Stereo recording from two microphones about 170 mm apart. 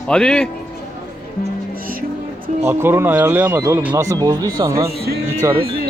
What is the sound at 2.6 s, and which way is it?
Speech, 15° right (ahead or behind).